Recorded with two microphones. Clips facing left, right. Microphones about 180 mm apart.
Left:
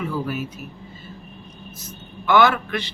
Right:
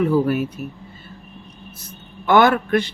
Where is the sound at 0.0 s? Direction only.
60° right (ahead or behind).